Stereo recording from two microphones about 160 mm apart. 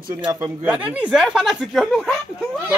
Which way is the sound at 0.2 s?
20° right (ahead or behind).